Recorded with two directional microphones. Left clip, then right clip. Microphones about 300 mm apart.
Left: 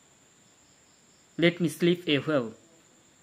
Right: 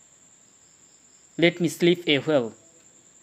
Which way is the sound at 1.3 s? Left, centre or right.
Centre.